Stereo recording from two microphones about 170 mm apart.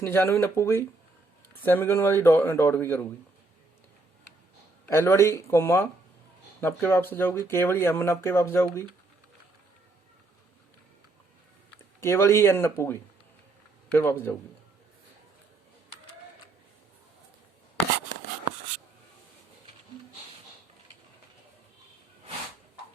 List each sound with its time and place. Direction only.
0.0 s speech: 15° left (ahead or behind)
4.9 s speech: 15° left (ahead or behind)
11.9 s speech: 15° left (ahead or behind)